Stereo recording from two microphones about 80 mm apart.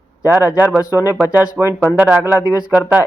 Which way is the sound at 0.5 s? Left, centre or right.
Centre.